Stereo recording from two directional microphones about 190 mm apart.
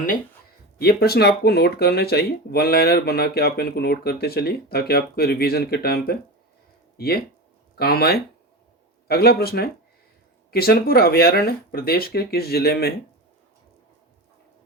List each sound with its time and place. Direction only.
0.8 s speech: 55° left (ahead or behind)